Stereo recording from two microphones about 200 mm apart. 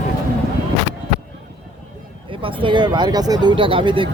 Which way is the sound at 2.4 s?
25° right (ahead or behind).